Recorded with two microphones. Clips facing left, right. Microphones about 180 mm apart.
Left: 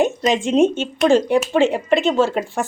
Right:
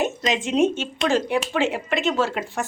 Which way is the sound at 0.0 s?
30° left (ahead or behind).